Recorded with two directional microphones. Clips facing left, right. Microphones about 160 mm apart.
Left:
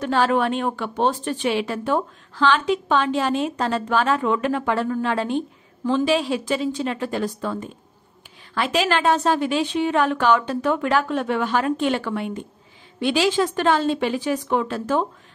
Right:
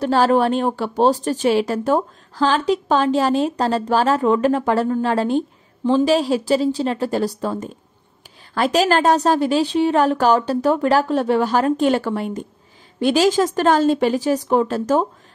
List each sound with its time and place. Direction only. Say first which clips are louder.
0.0 s a woman's voice: right 4 dB; 35° right (ahead or behind)